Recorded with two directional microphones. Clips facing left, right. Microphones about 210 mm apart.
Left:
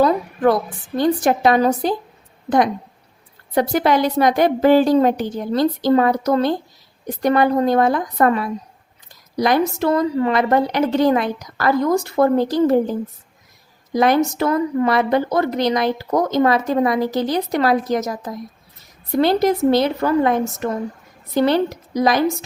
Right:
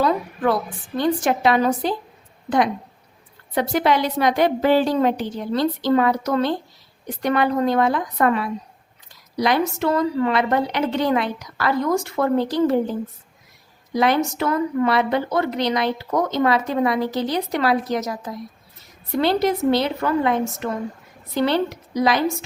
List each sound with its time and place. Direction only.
0.9 s a woman's voice: 40° left (ahead or behind)
3.5 s a woman's voice: 40° left (ahead or behind)
13.9 s a woman's voice: 45° left (ahead or behind)